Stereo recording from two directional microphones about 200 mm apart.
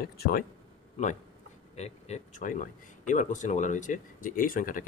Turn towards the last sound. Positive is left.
turn(degrees=45)  # may be behind; listen again after turning